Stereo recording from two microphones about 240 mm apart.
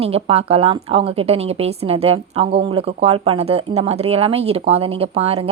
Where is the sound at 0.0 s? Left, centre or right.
Right.